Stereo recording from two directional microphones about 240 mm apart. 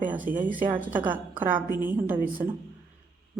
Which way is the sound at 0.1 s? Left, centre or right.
Centre.